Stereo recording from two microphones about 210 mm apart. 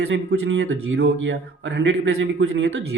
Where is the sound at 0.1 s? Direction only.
60° right (ahead or behind).